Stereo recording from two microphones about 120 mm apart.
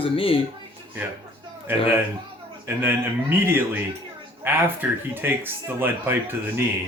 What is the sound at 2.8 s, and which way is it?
Speech, 20° right (ahead or behind).